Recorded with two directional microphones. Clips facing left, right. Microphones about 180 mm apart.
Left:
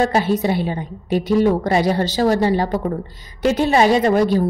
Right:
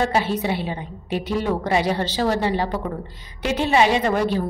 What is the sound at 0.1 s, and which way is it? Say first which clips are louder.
A woman's voice: left 4 dB; 45° left (ahead or behind).